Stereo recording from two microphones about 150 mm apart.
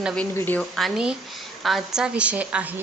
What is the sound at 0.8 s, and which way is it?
A woman's voice, centre (ahead or behind).